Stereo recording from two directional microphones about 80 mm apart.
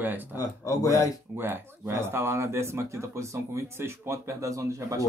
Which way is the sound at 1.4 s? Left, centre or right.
Right.